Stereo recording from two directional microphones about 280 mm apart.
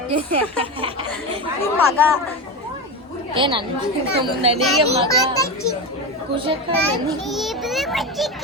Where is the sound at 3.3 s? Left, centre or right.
Centre.